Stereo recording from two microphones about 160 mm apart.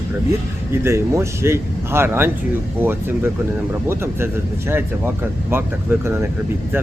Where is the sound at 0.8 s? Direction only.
15° right (ahead or behind).